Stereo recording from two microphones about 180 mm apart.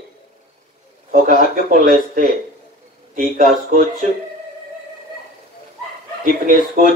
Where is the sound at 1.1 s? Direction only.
45° right (ahead or behind).